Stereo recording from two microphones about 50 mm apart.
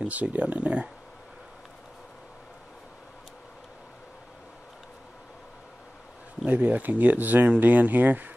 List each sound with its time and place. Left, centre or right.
0.1 s speech: right
6.4 s speech: right